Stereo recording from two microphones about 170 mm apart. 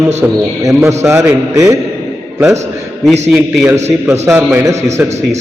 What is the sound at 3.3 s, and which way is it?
A man's voice, 15° right (ahead or behind).